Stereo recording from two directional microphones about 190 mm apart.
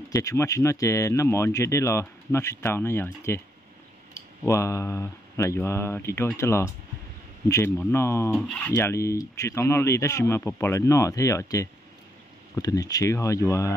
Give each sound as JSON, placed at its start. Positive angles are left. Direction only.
{"t": 0.1, "sound": "speech", "side_deg": 15}
{"t": 8.3, "sound": "speech", "side_deg": 0}
{"t": 8.7, "sound": "speech", "side_deg": 15}